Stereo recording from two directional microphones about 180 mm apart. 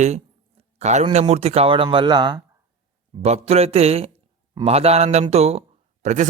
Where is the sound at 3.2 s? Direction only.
35° right (ahead or behind).